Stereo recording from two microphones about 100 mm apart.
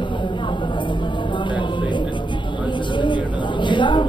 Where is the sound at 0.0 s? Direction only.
55° left (ahead or behind).